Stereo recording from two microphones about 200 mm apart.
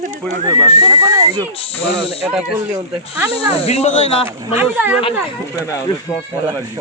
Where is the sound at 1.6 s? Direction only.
30° left (ahead or behind).